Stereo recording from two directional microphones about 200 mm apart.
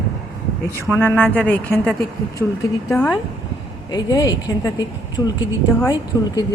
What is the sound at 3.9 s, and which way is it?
Speech, 20° left (ahead or behind).